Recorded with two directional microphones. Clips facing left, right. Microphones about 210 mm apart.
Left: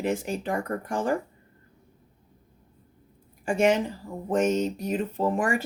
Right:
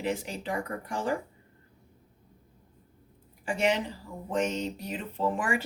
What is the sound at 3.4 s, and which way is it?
Speech, 45° left (ahead or behind).